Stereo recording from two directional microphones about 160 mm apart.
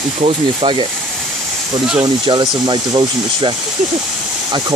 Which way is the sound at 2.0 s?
25° right (ahead or behind).